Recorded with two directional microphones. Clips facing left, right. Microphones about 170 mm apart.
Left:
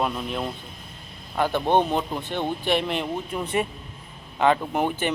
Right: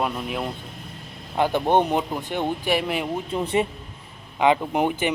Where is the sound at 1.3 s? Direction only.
15° right (ahead or behind).